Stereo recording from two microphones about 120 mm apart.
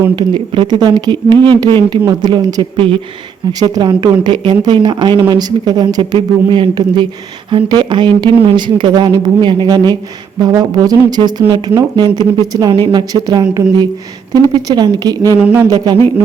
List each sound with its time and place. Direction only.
0.2 s speech: 40° right (ahead or behind)
15.4 s a sound: 10° right (ahead or behind)
15.6 s speech: 30° right (ahead or behind)